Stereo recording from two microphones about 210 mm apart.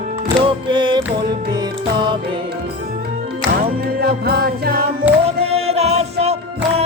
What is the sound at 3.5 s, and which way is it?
Music, 45° right (ahead or behind).